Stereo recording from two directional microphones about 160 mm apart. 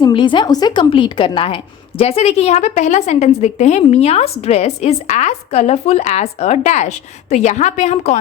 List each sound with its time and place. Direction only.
0.0 s a woman's voice: 30° left (ahead or behind); by 8.2 s 45° left (ahead or behind)